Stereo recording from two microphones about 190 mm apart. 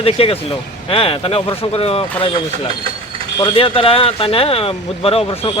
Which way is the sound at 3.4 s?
30° left (ahead or behind).